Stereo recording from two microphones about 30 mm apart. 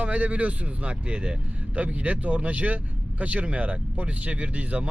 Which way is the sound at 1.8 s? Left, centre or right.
Right.